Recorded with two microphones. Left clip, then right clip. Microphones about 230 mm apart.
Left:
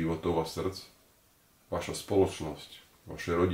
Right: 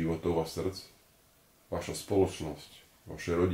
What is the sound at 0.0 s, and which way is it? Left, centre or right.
Speech, centre.